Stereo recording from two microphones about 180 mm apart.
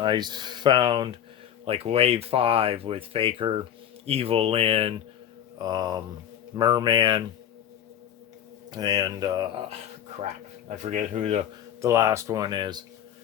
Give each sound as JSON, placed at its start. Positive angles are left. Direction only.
{"t": 0.0, "sound": "speech", "side_deg": -25}
{"t": 5.5, "sound": "speech", "side_deg": -20}
{"t": 8.7, "sound": "speech", "side_deg": -20}
{"t": 10.2, "sound": "speech", "side_deg": -40}
{"t": 11.8, "sound": "speech", "side_deg": -15}